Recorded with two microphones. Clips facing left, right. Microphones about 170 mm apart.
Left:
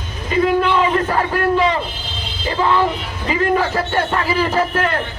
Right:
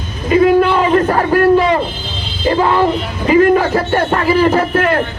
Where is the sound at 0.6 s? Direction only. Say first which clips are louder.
Right 5 dB; 45° right (ahead or behind).